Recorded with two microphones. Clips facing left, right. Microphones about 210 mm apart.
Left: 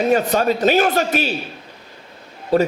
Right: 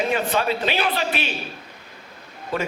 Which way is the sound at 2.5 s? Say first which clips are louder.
Left 10 dB; 40° left (ahead or behind).